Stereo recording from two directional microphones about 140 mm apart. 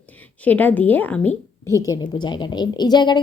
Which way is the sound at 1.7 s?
25° left (ahead or behind).